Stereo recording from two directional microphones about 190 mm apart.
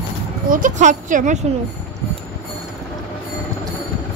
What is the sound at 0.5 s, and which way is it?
Speech, 45° right (ahead or behind).